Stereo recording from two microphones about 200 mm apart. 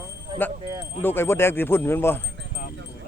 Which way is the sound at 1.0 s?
10° left (ahead or behind).